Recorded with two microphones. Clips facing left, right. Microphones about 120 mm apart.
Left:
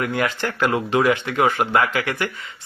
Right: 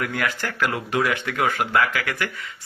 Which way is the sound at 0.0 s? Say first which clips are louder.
Left 4 dB; 25° left (ahead or behind).